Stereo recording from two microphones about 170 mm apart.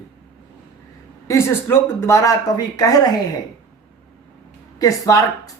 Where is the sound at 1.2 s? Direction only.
15° left (ahead or behind).